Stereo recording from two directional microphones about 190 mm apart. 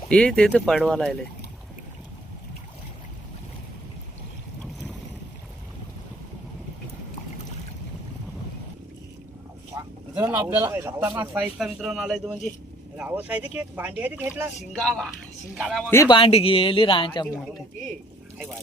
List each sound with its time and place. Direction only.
0.1 s speech: 5° left (ahead or behind)
9.7 s a sound: 15° right (ahead or behind)
10.4 s speech: 10° right (ahead or behind)
14.7 s speech: 5° left (ahead or behind)
16.0 s speech: 25° left (ahead or behind)